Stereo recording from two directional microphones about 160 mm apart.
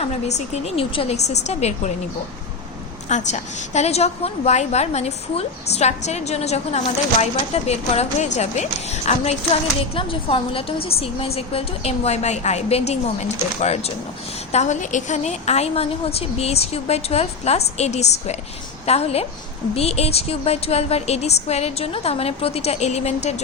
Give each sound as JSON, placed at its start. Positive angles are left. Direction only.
{"t": 0.0, "sound": "a woman's voice", "side_deg": 45}
{"t": 3.1, "sound": "a woman's voice", "side_deg": 45}